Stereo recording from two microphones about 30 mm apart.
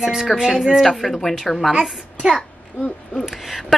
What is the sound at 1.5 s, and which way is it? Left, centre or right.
Speech, centre.